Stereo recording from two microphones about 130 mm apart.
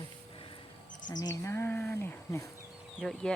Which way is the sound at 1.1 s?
30° left (ahead or behind).